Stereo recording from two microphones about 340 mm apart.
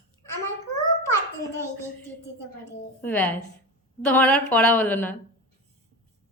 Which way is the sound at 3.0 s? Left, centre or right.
Centre.